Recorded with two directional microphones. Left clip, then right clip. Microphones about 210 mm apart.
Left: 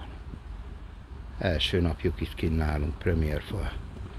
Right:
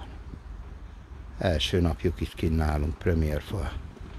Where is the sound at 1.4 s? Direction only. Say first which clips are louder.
Right 1 dB; 25° right (ahead or behind).